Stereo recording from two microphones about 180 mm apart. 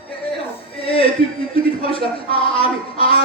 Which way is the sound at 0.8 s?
30° left (ahead or behind).